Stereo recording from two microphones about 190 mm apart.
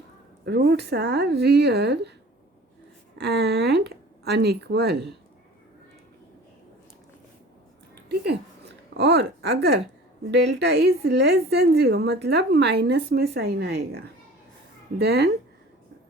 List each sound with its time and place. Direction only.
0.4 s a woman's voice: 60° right (ahead or behind)
3.2 s a woman's voice: 60° right (ahead or behind)
9.0 s a woman's voice: 60° right (ahead or behind)